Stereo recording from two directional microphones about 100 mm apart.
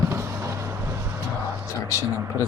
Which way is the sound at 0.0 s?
25° right (ahead or behind).